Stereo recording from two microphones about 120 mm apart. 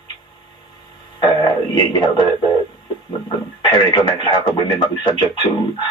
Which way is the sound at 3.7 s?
40° left (ahead or behind).